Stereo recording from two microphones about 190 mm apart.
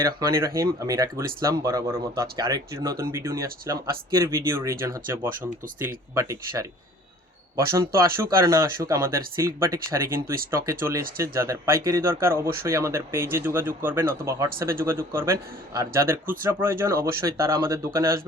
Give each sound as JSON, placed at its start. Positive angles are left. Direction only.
{"t": 0.0, "sound": "speech", "side_deg": -15}